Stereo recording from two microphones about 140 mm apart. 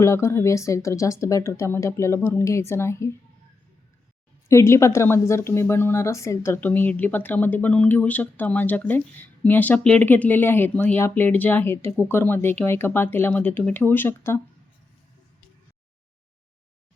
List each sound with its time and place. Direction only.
0.0 s speech: 20° left (ahead or behind)
4.4 s a woman's voice: 20° left (ahead or behind)